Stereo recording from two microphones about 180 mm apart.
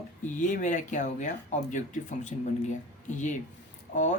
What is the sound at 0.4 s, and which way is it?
Speech, 45° left (ahead or behind).